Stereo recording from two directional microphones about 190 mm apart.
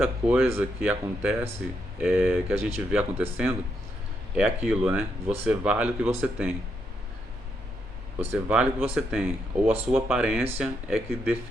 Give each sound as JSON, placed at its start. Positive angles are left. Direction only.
{"t": 0.0, "sound": "speech", "side_deg": -10}
{"t": 8.2, "sound": "speech", "side_deg": -10}